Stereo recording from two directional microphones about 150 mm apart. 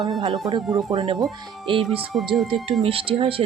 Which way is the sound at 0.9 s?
30° right (ahead or behind).